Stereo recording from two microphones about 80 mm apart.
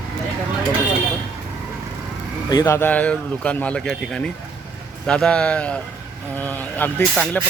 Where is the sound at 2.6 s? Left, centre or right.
Left.